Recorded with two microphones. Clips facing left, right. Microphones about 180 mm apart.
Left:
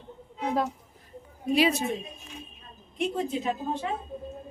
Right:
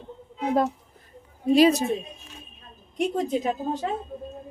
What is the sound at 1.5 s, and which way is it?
Speech, 40° right (ahead or behind).